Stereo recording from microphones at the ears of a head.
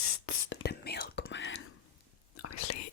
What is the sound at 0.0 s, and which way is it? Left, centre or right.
Whispering, left.